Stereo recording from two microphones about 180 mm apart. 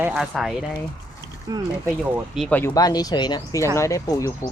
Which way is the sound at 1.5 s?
25° right (ahead or behind).